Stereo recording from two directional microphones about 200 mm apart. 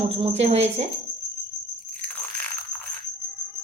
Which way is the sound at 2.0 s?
5° left (ahead or behind).